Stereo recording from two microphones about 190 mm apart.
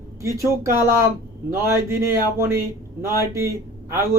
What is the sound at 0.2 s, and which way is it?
A man's voice, 15° right (ahead or behind).